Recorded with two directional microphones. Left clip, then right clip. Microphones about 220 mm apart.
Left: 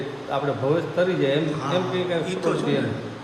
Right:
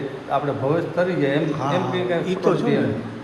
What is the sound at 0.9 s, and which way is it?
Mantra, centre (ahead or behind).